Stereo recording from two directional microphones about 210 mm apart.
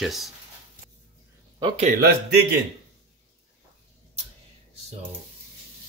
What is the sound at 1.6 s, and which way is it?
Speech, 30° right (ahead or behind).